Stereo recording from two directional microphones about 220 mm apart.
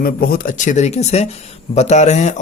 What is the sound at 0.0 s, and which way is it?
Speech, 40° left (ahead or behind).